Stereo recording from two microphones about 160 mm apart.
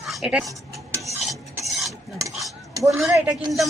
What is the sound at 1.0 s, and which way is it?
Stir, centre (ahead or behind).